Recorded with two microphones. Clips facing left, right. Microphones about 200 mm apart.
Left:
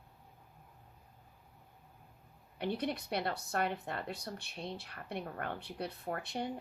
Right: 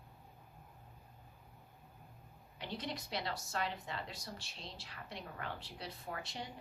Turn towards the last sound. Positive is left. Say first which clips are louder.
# left 7 dB
turn(degrees=60)  # may be behind; listen again after turning